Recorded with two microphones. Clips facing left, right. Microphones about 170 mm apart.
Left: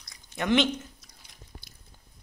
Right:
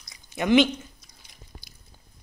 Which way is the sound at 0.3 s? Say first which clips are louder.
Right 5 dB; 5° right (ahead or behind).